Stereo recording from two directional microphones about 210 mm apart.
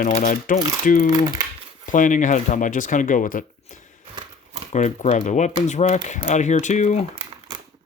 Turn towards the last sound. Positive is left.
turn(degrees=35)  # may be behind; listen again after turning